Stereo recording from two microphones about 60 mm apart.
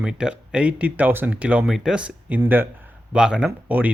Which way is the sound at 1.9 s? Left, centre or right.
Centre.